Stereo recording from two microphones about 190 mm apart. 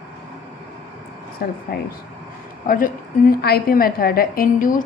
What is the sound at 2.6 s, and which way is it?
A woman's voice, 45° left (ahead or behind).